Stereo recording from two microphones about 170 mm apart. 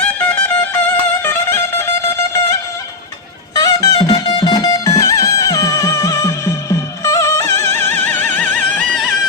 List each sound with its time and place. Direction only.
0.0 s music: 10° left (ahead or behind)